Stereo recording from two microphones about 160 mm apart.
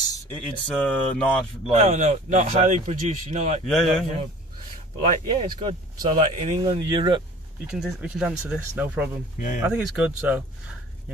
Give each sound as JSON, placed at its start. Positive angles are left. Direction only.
{"t": 0.3, "sound": "speech", "side_deg": 10}
{"t": 1.7, "sound": "speech", "side_deg": -45}
{"t": 3.6, "sound": "a man's voice", "side_deg": 0}
{"t": 4.9, "sound": "speech", "side_deg": -35}
{"t": 7.7, "sound": "speech", "side_deg": -5}